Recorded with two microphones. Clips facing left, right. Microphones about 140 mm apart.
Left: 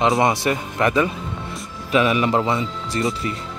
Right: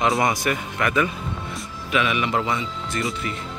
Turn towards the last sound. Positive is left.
turn(degrees=35)  # may be behind; listen again after turning